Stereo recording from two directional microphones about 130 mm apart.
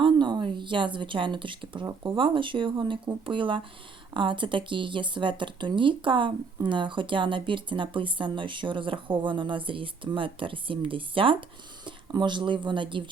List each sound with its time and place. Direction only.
0.0 s speech: 35° right (ahead or behind)